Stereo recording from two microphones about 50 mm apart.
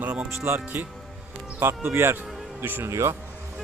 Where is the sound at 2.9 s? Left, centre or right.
Right.